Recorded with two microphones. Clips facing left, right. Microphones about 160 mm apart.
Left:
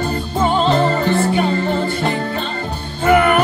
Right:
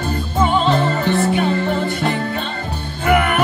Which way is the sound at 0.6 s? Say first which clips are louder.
Left 2 dB; 35° left (ahead or behind).